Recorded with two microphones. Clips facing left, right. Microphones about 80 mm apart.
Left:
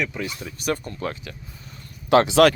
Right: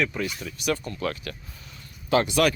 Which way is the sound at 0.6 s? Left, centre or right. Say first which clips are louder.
Left 1 dB; left.